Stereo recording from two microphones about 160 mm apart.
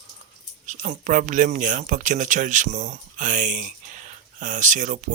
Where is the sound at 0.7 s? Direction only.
50° right (ahead or behind).